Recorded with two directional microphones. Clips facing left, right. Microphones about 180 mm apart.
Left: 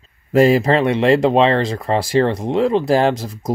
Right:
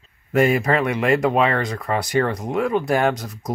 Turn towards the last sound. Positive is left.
turn(degrees=25)  # may be behind; listen again after turning